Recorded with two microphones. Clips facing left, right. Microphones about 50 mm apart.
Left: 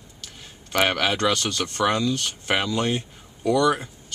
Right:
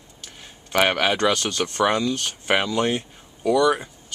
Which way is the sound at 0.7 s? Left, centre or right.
Centre.